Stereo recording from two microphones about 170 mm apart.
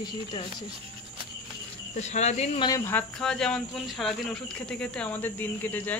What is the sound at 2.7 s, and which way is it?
Speech, 10° left (ahead or behind).